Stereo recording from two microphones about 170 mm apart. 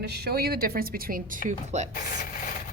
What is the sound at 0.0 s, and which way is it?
Speech, 70° right (ahead or behind).